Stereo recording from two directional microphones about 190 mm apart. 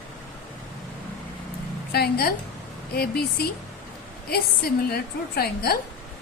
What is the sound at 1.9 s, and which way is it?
A woman's voice, 55° left (ahead or behind).